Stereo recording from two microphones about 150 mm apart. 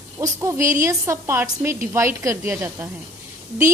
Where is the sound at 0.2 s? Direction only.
20° right (ahead or behind).